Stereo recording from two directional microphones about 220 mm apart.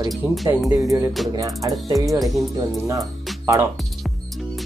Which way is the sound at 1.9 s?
Centre (ahead or behind).